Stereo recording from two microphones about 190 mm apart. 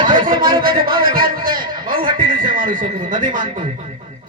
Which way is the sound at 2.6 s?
45° right (ahead or behind).